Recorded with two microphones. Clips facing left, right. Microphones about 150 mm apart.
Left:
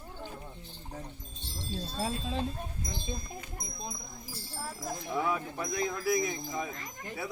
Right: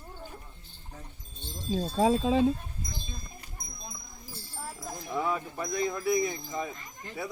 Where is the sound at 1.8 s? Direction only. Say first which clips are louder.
Right 11 dB; 90° right.